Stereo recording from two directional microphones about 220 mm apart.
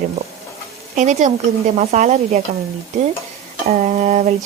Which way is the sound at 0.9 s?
35° right (ahead or behind).